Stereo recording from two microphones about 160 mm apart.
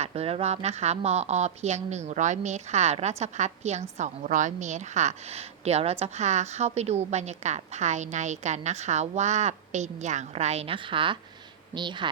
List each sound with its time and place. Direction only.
0.0 s a woman's voice: 40° right (ahead or behind)